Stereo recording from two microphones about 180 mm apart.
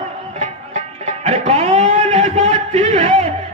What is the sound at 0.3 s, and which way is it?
Music, 40° right (ahead or behind).